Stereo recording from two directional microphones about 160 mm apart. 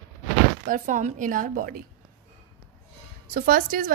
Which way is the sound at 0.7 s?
50° right (ahead or behind).